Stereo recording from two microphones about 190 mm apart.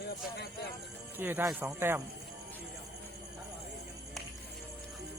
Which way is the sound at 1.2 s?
10° right (ahead or behind).